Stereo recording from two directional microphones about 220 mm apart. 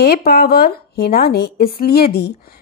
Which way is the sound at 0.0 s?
45° left (ahead or behind).